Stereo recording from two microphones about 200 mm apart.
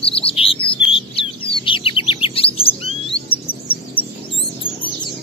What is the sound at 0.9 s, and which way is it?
Bird, 25° left (ahead or behind).